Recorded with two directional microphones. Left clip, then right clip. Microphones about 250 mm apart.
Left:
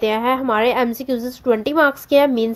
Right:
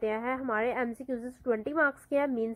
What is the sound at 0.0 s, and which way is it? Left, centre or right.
A woman's voice, left.